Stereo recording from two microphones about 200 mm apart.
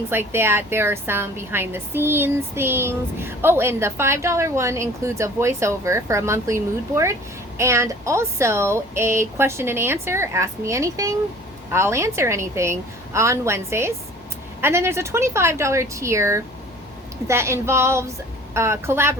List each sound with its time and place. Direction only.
0.1 s a woman's voice: 10° right (ahead or behind)